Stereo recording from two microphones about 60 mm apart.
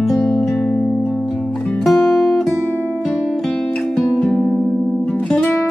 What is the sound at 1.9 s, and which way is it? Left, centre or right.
Music, centre.